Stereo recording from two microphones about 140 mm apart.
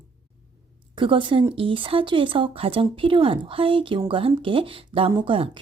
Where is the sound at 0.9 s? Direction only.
35° right (ahead or behind).